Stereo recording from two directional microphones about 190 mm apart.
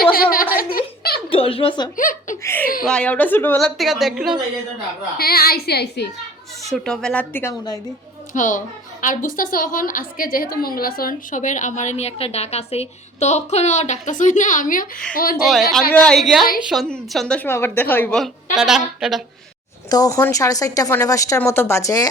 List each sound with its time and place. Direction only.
0.1 s a sound: 50° left (ahead or behind)
0.5 s giggle: 50° left (ahead or behind)
1.3 s a sound: 30° left (ahead or behind)
2.0 s speech: 40° left (ahead or behind)
2.4 s a woman's voice: 10° left (ahead or behind)
3.8 s a woman's voice: centre (ahead or behind)
5.1 s a woman's voice: 55° left (ahead or behind)
6.7 s a woman's voice: centre (ahead or behind)
8.3 s a woman's voice: 45° left (ahead or behind)
15.4 s a woman's voice: centre (ahead or behind)
19.9 s a woman's voice: 20° left (ahead or behind)